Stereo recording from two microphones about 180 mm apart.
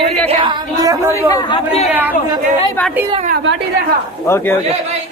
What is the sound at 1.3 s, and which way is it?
Speech, 30° left (ahead or behind).